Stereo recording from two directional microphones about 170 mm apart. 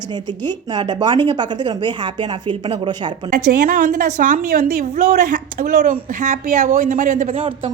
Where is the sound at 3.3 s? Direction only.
55° right (ahead or behind).